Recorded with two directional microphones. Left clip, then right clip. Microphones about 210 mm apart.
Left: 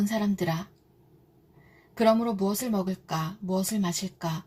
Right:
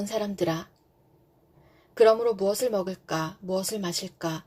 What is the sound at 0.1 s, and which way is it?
Speech, 35° right (ahead or behind).